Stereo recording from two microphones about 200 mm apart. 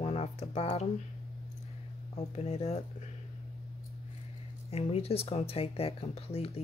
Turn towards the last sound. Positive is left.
turn(degrees=30)  # may be behind; listen again after turning